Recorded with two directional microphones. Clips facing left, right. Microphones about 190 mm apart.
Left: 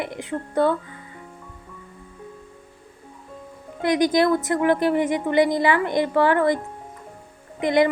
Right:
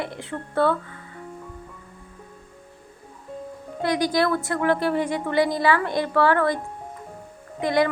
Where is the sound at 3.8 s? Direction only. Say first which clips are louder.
Left 3 dB; 20° left (ahead or behind).